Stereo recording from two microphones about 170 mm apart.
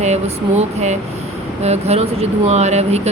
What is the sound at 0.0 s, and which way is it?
A woman's voice, 40° right (ahead or behind).